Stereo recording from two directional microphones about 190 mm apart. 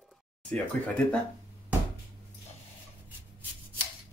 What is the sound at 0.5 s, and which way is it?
Speech, 5° left (ahead or behind).